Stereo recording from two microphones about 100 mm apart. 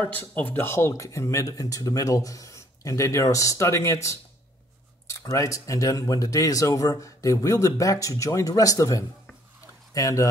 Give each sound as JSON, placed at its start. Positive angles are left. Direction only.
{"t": 0.0, "sound": "speech", "side_deg": 15}